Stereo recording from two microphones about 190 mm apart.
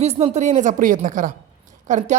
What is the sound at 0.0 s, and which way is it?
Speech, 35° right (ahead or behind).